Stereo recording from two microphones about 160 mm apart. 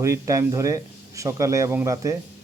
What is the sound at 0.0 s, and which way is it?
Speech, 20° right (ahead or behind).